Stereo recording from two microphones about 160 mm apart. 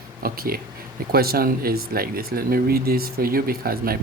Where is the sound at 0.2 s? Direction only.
70° right (ahead or behind).